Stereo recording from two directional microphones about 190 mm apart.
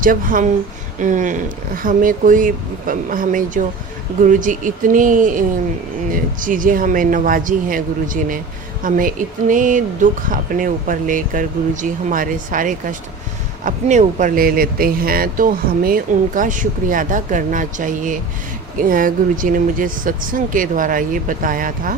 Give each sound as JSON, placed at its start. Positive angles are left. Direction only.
{"t": 0.0, "sound": "speech", "side_deg": -45}